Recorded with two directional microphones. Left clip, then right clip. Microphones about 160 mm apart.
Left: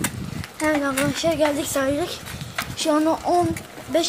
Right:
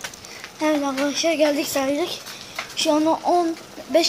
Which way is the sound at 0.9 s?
Centre (ahead or behind).